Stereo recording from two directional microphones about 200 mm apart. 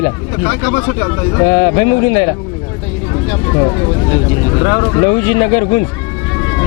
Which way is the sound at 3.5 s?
30° left (ahead or behind).